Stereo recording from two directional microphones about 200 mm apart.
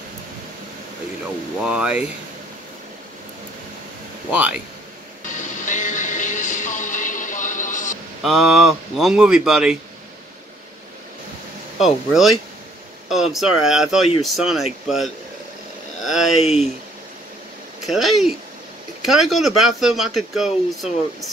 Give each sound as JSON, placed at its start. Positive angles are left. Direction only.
{"t": 1.6, "sound": "speech", "side_deg": -5}
{"t": 4.3, "sound": "speech", "side_deg": -5}
{"t": 5.4, "sound": "music", "side_deg": 40}
{"t": 8.2, "sound": "speech", "side_deg": 0}
{"t": 11.8, "sound": "speech", "side_deg": 0}
{"t": 16.1, "sound": "speech", "side_deg": 0}
{"t": 17.8, "sound": "speech", "side_deg": 0}